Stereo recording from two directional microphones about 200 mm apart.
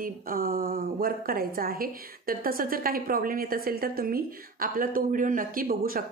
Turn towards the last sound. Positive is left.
turn(degrees=-45)  # may be behind; listen again after turning